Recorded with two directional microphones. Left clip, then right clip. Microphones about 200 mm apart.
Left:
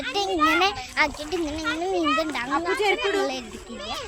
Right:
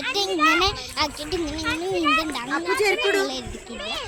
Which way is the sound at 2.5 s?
50° left (ahead or behind).